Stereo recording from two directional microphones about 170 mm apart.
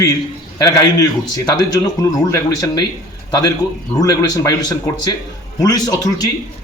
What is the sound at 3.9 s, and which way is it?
A man's voice, 20° left (ahead or behind).